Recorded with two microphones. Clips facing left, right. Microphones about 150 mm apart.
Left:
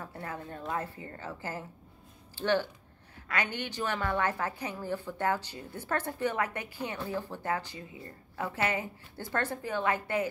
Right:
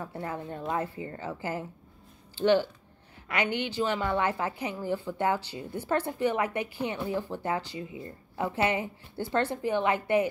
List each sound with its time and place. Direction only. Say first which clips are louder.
0.1 s a woman's voice: right 4 dB; 25° right (ahead or behind)